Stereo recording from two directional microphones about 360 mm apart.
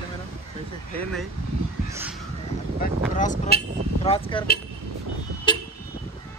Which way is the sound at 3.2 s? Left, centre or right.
Left.